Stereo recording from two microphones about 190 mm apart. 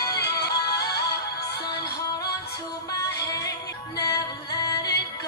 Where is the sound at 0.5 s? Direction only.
55° left (ahead or behind).